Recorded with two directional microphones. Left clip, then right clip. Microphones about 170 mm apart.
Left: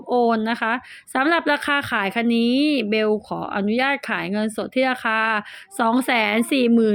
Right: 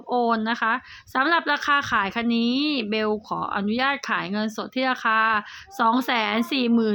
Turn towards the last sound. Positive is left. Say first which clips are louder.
# left 5 dB
turn(degrees=15)  # may be behind; listen again after turning